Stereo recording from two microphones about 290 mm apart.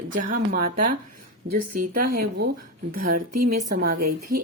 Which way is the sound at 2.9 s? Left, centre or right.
Right.